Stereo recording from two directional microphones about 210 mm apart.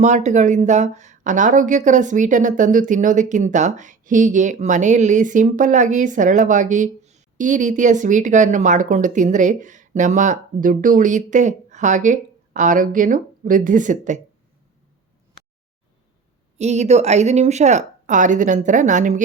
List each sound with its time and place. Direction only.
0.0 s speech: 35° right (ahead or behind)
16.6 s speech: 30° right (ahead or behind)